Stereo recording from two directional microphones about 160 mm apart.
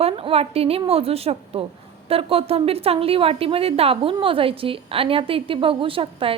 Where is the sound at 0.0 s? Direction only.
35° right (ahead or behind).